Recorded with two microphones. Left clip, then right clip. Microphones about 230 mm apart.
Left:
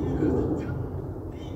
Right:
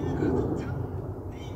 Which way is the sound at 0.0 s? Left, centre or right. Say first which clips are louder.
Left 2 dB; right.